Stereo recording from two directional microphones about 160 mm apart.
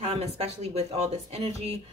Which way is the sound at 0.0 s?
40° right (ahead or behind).